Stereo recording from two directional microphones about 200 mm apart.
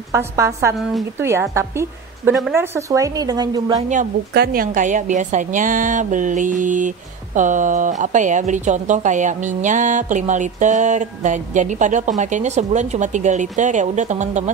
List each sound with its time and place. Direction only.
0.1 s a woman's voice: 15° right (ahead or behind)
4.3 s speech: 50° right (ahead or behind)